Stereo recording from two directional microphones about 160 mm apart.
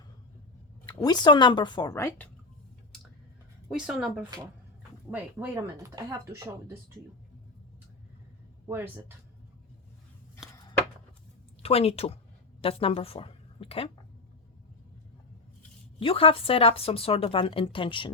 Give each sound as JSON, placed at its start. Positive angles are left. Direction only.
{"t": 1.0, "sound": "speech", "side_deg": 25}
{"t": 3.7, "sound": "speech", "side_deg": -5}
{"t": 6.0, "sound": "speech", "side_deg": -20}
{"t": 8.6, "sound": "speech", "side_deg": -15}
{"t": 10.5, "sound": "chopping", "side_deg": 25}
{"t": 11.6, "sound": "a woman's voice", "side_deg": 40}
{"t": 16.0, "sound": "speech", "side_deg": 35}